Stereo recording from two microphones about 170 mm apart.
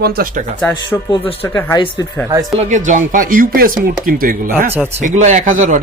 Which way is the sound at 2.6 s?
45° right (ahead or behind).